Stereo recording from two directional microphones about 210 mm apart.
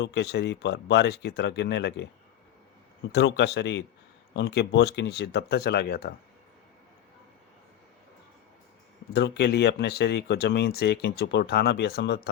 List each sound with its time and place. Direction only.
0.0 s speech: 55° left (ahead or behind)
3.1 s speech: 55° left (ahead or behind)
9.1 s speech: 50° left (ahead or behind)